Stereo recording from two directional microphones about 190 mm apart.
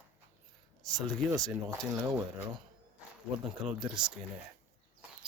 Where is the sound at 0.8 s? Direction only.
5° left (ahead or behind).